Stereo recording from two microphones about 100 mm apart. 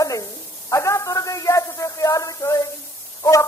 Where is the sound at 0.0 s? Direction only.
35° left (ahead or behind).